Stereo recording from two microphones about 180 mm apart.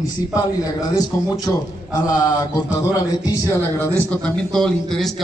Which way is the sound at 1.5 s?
20° left (ahead or behind).